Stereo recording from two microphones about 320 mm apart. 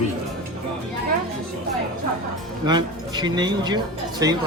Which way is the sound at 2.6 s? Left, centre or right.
Centre.